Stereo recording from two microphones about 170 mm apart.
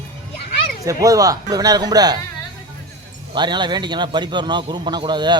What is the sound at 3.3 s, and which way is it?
A man's voice, 25° right (ahead or behind).